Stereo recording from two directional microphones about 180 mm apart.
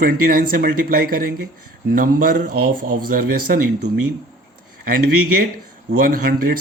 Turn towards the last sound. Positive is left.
turn(degrees=-55)  # may be behind; listen again after turning